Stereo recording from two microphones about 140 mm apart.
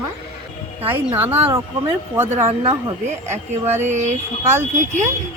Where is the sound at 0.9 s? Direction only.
15° right (ahead or behind).